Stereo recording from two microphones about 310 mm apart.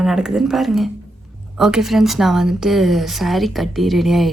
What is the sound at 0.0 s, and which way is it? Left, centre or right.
Speech, centre.